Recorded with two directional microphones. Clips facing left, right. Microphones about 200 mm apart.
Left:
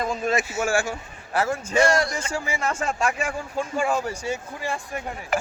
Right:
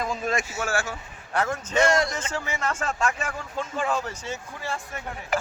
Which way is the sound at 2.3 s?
10° left (ahead or behind).